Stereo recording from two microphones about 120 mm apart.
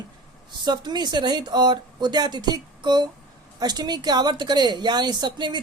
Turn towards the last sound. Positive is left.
turn(degrees=-40)  # may be behind; listen again after turning